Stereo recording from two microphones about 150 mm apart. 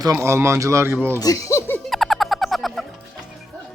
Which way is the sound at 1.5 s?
15° left (ahead or behind).